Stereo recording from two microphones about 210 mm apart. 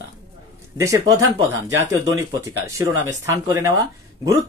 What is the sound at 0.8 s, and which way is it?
Speech, 15° right (ahead or behind).